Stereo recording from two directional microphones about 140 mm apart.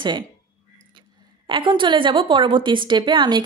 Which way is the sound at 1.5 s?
35° right (ahead or behind).